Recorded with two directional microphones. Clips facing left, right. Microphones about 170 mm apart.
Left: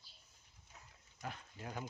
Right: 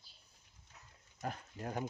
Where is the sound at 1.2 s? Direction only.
45° right (ahead or behind).